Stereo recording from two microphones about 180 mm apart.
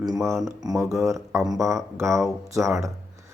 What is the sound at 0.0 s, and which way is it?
Speech, 20° right (ahead or behind).